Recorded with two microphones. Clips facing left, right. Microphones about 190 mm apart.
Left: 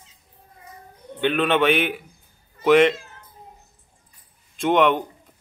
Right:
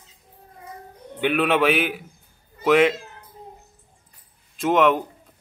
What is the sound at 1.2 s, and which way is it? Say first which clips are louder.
A man's voice: even; 5° right (ahead or behind).